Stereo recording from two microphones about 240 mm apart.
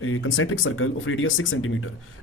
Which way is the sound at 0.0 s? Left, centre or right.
Left.